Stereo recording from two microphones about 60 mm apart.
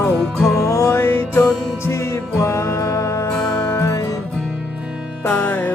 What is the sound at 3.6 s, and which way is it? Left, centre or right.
Music, left.